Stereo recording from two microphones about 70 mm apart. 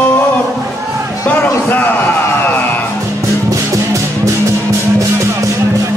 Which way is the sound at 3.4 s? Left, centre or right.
Right.